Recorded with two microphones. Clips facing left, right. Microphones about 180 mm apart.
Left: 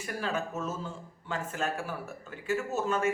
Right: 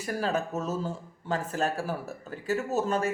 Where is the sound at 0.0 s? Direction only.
40° right (ahead or behind).